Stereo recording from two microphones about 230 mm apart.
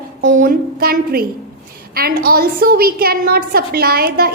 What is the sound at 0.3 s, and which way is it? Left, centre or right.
A woman's voice, right.